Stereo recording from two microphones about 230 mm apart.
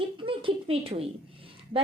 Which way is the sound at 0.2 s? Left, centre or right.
Right.